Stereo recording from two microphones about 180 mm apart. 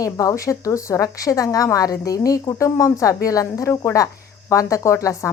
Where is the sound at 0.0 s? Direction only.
20° left (ahead or behind).